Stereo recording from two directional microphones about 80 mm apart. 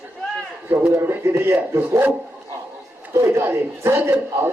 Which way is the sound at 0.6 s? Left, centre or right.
Right.